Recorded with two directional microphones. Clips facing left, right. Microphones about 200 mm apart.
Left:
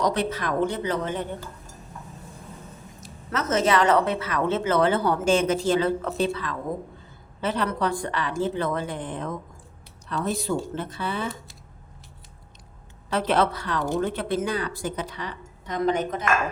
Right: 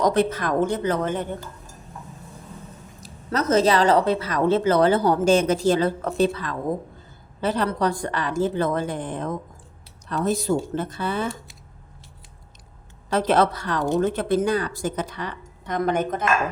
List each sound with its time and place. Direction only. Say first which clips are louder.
0.0 s a woman's voice: right 4 dB; 45° right (ahead or behind)
3.0 s a woman's voice: right 4 dB; 35° right (ahead or behind)
13.1 s a woman's voice: right 3 dB; 40° right (ahead or behind)